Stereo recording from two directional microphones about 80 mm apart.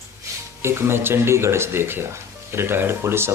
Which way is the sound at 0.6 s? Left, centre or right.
Right.